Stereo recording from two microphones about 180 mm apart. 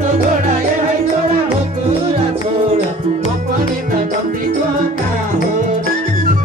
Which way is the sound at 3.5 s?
50° right (ahead or behind).